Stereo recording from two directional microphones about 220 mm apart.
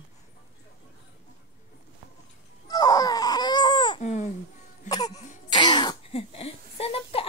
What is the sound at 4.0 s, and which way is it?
Baby cry, 35° left (ahead or behind).